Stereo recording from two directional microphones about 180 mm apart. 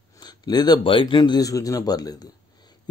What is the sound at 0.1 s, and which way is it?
Speech, 25° left (ahead or behind).